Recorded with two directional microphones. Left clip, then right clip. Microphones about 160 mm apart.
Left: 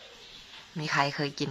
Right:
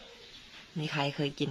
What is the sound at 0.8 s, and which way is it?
Speech, 15° right (ahead or behind).